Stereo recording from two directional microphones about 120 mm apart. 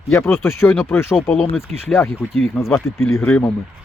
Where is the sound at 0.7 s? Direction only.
5° left (ahead or behind).